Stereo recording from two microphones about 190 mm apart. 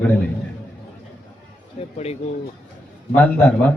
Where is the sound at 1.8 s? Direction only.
35° left (ahead or behind).